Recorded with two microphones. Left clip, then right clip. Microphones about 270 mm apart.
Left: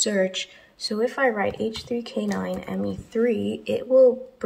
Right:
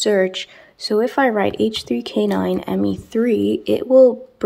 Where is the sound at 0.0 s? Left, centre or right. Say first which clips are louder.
Right 6 dB; centre.